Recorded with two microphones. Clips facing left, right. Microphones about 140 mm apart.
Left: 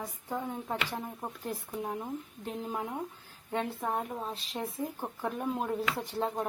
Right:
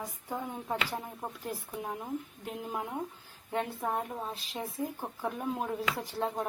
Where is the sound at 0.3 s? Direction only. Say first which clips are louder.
Left 1 dB; 10° right (ahead or behind).